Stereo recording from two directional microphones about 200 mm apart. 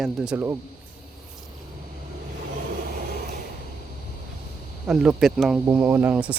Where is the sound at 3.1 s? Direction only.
50° right (ahead or behind).